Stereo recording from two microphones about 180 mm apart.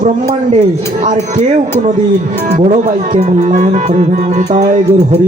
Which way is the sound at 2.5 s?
45° right (ahead or behind).